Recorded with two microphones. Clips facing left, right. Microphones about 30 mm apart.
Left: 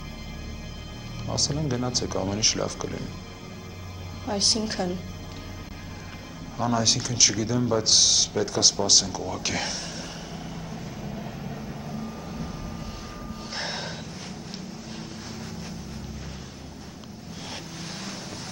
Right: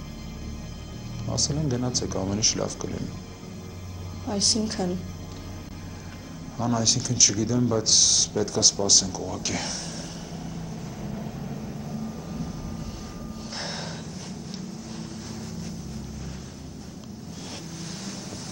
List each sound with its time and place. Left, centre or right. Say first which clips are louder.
1.2 s speech: even; centre
4.3 s speech: even; centre
6.6 s a sound: left 1 dB; centre
13.6 s gasp: left 2 dB; centre